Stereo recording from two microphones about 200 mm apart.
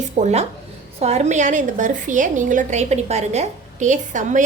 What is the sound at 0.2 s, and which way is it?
A woman's voice, 35° right (ahead or behind).